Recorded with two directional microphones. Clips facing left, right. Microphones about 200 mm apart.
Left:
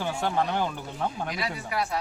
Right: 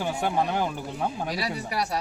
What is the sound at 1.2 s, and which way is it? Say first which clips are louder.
Speech: right 2 dB; 35° right (ahead or behind).